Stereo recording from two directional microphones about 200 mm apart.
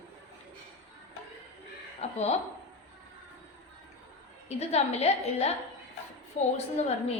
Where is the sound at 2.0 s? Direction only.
35° left (ahead or behind).